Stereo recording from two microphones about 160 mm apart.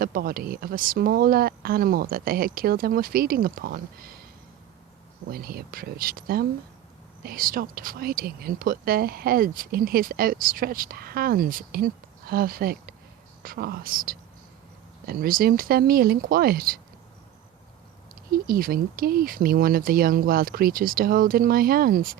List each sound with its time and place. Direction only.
0.0 s speech: 65° right (ahead or behind)
5.3 s speech: 70° right (ahead or behind)
18.3 s speech: 65° right (ahead or behind)